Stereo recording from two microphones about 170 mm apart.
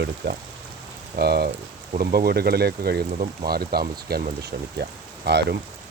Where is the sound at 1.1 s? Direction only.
70° right (ahead or behind).